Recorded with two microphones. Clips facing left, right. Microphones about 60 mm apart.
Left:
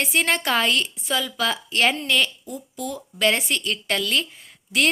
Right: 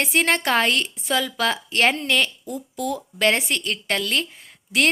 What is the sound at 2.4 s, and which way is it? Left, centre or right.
Speech, right.